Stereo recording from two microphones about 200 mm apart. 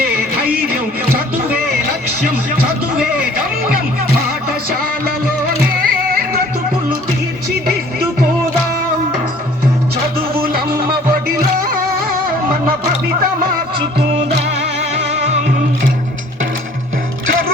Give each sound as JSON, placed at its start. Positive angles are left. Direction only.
{"t": 0.3, "sound": "music", "side_deg": -50}
{"t": 4.4, "sound": "music", "side_deg": -50}
{"t": 10.3, "sound": "music", "side_deg": -50}
{"t": 15.1, "sound": "music", "side_deg": -35}